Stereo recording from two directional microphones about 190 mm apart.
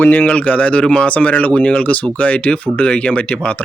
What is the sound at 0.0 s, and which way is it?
Speech, 10° left (ahead or behind).